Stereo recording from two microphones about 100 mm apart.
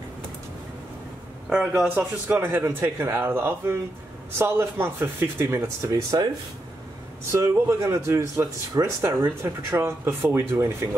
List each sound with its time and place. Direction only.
1.5 s a man's voice: 15° right (ahead or behind)
5.6 s speech: 35° right (ahead or behind)
7.3 s a man's voice: 30° right (ahead or behind)